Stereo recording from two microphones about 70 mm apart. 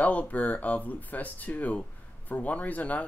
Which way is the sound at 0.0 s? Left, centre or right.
Left.